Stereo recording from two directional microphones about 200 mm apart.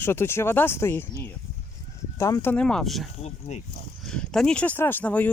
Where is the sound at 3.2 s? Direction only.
35° left (ahead or behind).